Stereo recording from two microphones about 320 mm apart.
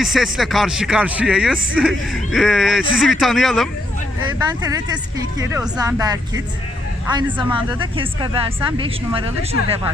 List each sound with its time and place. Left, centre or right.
0.0 s speech: centre
4.4 s speech: centre